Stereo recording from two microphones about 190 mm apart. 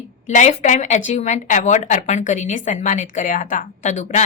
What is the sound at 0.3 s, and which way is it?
Speech, 35° left (ahead or behind).